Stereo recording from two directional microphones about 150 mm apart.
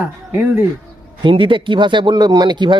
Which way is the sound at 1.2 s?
35° right (ahead or behind).